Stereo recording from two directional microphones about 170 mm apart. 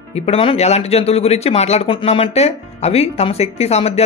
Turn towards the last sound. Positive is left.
turn(degrees=35)  # may be behind; listen again after turning